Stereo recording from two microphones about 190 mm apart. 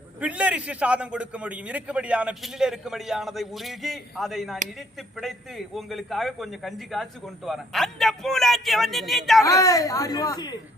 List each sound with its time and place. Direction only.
0.2 s a man's voice: 5° right (ahead or behind)
9.4 s speech: 20° left (ahead or behind)